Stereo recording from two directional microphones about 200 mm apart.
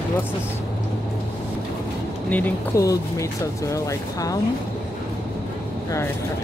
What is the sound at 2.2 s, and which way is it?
Speech, 10° left (ahead or behind).